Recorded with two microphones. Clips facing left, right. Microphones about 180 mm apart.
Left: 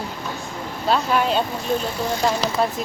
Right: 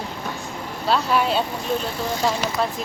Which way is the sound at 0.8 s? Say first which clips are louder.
Left 1 dB; centre (ahead or behind).